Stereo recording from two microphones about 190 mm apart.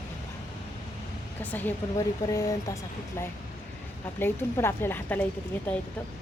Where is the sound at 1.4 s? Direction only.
10° left (ahead or behind).